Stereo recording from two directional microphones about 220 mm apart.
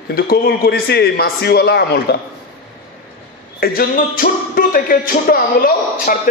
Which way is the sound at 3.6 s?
40° left (ahead or behind).